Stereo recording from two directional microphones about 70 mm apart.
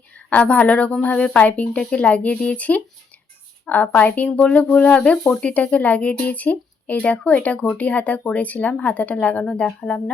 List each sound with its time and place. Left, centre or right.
0.3 s a woman's voice: left